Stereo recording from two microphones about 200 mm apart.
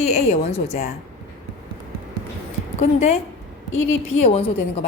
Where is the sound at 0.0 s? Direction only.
35° left (ahead or behind).